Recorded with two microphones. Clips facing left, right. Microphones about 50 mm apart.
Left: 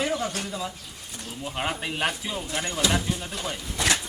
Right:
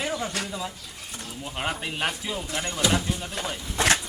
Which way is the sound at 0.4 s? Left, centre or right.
Centre.